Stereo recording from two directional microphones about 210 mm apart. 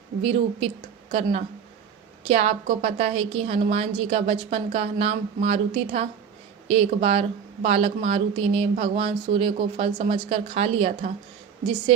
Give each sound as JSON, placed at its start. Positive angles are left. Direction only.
{"t": 0.2, "sound": "a woman's voice", "side_deg": -25}
{"t": 2.2, "sound": "a woman's voice", "side_deg": -30}